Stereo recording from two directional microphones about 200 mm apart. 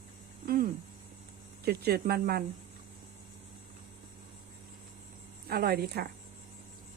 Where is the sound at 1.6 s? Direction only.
50° right (ahead or behind).